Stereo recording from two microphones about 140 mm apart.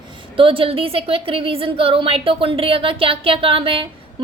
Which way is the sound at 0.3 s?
40° right (ahead or behind).